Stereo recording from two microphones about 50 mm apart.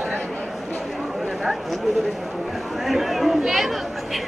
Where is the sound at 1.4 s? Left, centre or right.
Centre.